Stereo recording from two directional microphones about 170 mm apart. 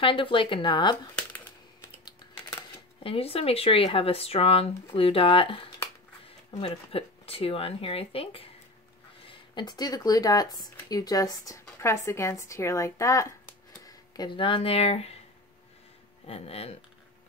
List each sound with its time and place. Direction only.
0.0 s speech: 30° left (ahead or behind)
1.1 s a sound: 10° left (ahead or behind)
2.0 s speech: 30° left (ahead or behind)
16.3 s speech: 35° left (ahead or behind)